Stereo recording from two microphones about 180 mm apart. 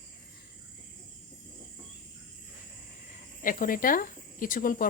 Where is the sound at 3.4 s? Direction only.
50° left (ahead or behind).